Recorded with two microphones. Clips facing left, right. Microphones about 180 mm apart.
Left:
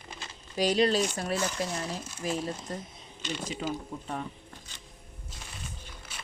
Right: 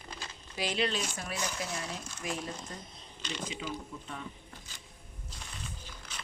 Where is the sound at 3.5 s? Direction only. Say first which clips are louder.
Left 5 dB; 45° left (ahead or behind).